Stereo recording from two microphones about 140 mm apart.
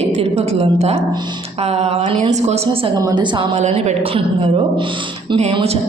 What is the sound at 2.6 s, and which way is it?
Speech, 35° right (ahead or behind).